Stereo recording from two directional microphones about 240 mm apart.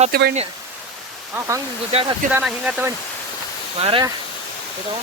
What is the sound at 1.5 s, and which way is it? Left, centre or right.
Speech, centre.